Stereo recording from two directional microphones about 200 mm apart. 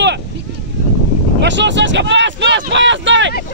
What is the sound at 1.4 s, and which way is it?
Speech, 65° right (ahead or behind).